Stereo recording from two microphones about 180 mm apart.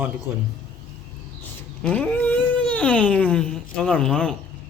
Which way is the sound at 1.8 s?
5° left (ahead or behind).